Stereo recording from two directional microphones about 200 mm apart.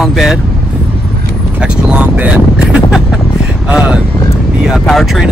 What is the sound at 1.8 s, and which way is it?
Speech, 5° right (ahead or behind).